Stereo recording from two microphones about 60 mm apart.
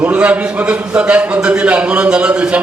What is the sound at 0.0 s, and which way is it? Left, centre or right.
A man's voice, right.